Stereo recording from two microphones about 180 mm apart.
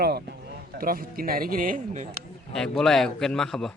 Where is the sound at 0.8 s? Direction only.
55° right (ahead or behind).